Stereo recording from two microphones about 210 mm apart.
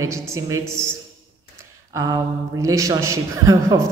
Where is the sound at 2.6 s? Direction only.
15° right (ahead or behind).